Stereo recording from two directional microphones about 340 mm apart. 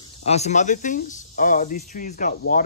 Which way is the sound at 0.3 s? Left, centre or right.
Centre.